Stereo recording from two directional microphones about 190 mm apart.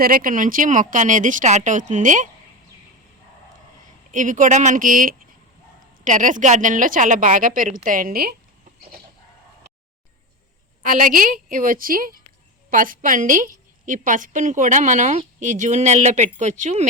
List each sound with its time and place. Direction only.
0.0 s speech: 45° right (ahead or behind)
4.1 s speech: 45° right (ahead or behind)
10.8 s a woman's voice: 45° right (ahead or behind)